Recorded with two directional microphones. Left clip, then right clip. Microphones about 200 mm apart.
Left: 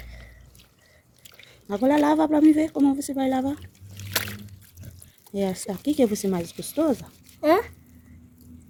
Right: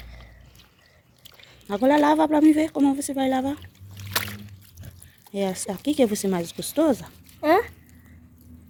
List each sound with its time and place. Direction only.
1.6 s speech: 15° left (ahead or behind)
5.3 s speech: 20° left (ahead or behind); by 7.1 s 5° left (ahead or behind)